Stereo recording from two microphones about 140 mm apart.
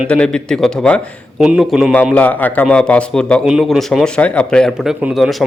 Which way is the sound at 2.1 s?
10° left (ahead or behind).